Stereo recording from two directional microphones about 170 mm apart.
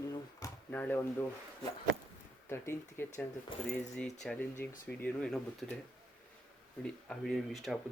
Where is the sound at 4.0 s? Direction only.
5° left (ahead or behind).